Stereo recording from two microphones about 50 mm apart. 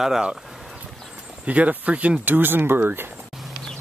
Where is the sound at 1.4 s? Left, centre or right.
Right.